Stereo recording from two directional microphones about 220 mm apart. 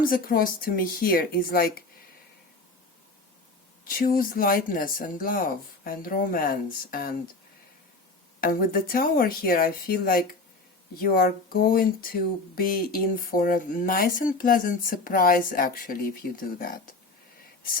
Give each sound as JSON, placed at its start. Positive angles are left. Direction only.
{"t": 0.0, "sound": "speech", "side_deg": 40}
{"t": 3.8, "sound": "speech", "side_deg": 40}
{"t": 8.4, "sound": "speech", "side_deg": 40}